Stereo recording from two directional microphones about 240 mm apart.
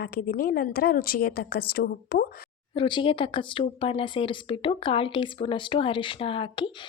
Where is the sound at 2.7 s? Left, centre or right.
Left.